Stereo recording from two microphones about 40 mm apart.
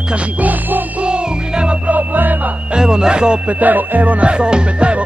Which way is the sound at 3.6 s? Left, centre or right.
Right.